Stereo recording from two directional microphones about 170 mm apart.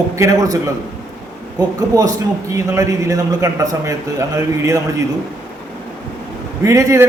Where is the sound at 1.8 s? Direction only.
20° right (ahead or behind).